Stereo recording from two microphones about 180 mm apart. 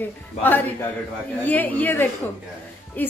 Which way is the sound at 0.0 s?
10° left (ahead or behind).